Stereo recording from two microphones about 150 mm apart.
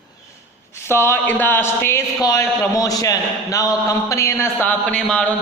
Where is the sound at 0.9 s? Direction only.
15° left (ahead or behind).